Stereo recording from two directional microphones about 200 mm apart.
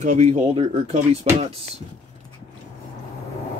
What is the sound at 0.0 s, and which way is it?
Speech, 35° right (ahead or behind).